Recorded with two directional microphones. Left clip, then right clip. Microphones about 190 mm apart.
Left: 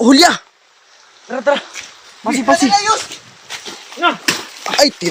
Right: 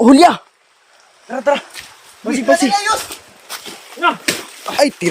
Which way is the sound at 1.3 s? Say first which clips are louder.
Even; 10° left (ahead or behind).